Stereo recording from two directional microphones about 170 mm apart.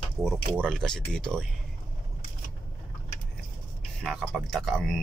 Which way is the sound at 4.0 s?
Centre (ahead or behind).